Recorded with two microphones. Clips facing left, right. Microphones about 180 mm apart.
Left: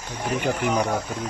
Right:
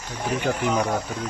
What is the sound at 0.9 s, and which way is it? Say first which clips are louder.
Speech: even; 15° left (ahead or behind).